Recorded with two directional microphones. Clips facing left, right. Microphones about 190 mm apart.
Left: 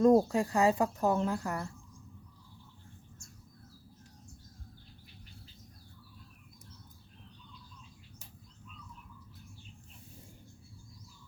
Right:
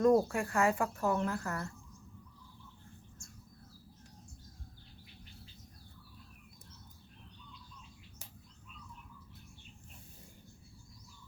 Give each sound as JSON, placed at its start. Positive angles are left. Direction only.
{"t": 0.0, "sound": "speech", "side_deg": 25}